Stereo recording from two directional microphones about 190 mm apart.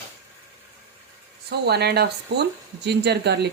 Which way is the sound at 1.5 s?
60° right (ahead or behind).